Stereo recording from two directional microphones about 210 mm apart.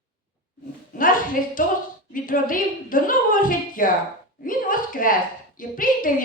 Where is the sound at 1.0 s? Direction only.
40° left (ahead or behind).